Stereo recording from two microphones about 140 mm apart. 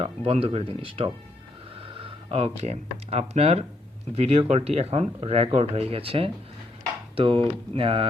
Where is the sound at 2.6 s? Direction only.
50° right (ahead or behind).